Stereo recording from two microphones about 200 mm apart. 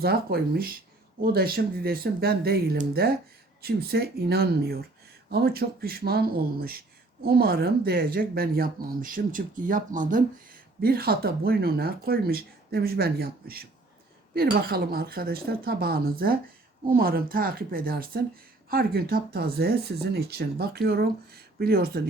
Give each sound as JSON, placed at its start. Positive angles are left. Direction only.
{"t": 0.0, "sound": "speech", "side_deg": -50}